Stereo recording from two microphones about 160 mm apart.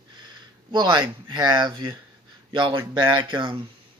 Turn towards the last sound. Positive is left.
turn(degrees=-30)  # may be behind; listen again after turning